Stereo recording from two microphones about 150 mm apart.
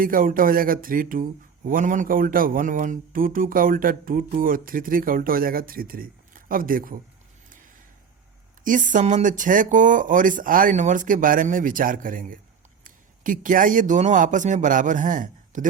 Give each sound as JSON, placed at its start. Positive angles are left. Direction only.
{"t": 0.0, "sound": "speech", "side_deg": -70}
{"t": 8.6, "sound": "speech", "side_deg": -60}